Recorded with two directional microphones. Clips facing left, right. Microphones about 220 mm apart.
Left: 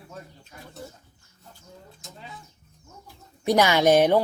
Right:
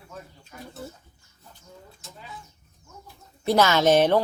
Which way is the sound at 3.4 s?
15° left (ahead or behind).